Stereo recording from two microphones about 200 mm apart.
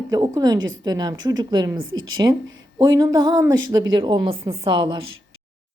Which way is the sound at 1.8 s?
85° right.